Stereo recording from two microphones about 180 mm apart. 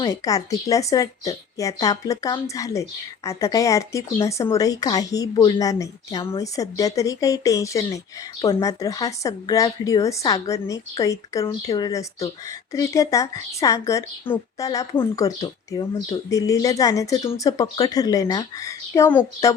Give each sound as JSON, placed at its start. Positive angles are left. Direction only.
{"t": 0.0, "sound": "speech", "side_deg": 20}